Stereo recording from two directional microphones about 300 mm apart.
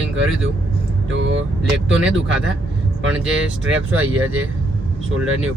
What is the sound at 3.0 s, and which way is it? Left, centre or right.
Speech, right.